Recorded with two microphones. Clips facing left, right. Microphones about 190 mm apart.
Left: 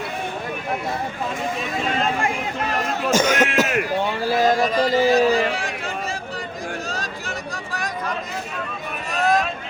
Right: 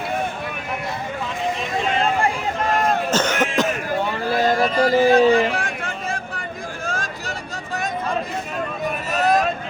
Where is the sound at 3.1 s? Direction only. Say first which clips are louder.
Left 2 dB; 10° left (ahead or behind).